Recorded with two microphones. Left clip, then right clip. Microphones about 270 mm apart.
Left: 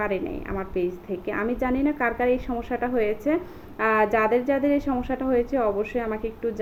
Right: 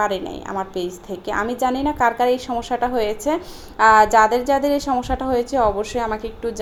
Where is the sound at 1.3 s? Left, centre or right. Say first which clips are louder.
Right 6 dB; centre.